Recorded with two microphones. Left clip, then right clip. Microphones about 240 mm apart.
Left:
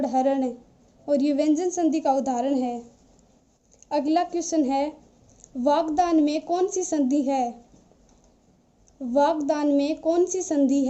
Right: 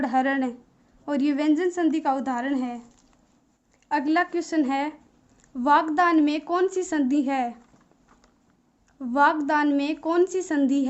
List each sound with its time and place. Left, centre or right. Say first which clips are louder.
0.0 s a woman's voice: left 1 dB; centre
3.8 s a woman's voice: even; centre
9.1 s a woman's voice: right 1 dB; centre